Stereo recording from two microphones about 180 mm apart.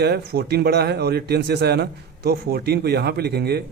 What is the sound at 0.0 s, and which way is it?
Speech, 65° right (ahead or behind).